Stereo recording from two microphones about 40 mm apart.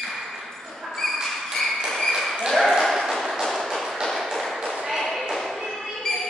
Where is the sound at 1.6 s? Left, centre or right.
Centre.